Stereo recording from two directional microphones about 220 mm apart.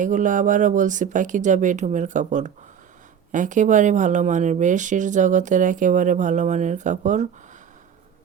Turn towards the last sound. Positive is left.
turn(degrees=-35)  # may be behind; listen again after turning